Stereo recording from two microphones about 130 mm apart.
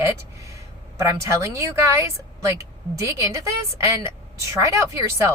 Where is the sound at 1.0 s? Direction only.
20° right (ahead or behind).